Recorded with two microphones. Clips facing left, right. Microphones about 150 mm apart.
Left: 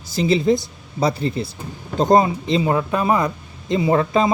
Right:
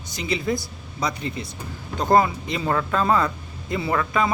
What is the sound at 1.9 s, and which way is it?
Speech, 20° left (ahead or behind).